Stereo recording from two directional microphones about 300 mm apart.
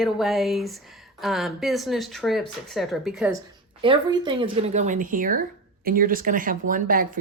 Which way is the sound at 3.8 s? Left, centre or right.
Centre.